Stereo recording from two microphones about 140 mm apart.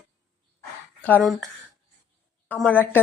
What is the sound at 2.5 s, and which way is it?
Speech, 10° left (ahead or behind).